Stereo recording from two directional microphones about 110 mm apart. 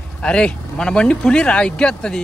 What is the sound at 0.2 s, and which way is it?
Speech, 10° left (ahead or behind).